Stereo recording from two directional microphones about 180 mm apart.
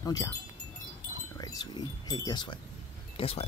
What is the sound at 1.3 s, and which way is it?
Speech, 20° left (ahead or behind).